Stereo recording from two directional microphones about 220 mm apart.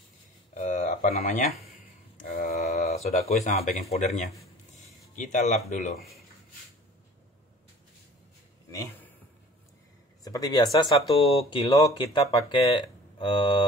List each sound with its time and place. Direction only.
0.6 s a sound: 35° left (ahead or behind)
3.9 s speech: 30° left (ahead or behind)
8.7 s a man's voice: 10° left (ahead or behind)
10.2 s speech: 15° left (ahead or behind)